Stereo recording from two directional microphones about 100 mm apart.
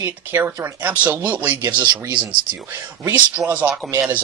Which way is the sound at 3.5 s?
15° right (ahead or behind).